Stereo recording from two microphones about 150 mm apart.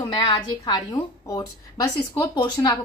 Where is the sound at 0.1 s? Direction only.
30° left (ahead or behind).